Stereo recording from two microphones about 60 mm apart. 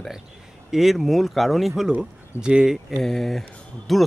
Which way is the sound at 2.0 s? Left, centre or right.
Centre.